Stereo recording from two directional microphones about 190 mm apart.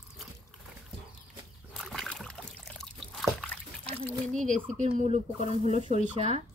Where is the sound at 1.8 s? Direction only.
Centre (ahead or behind).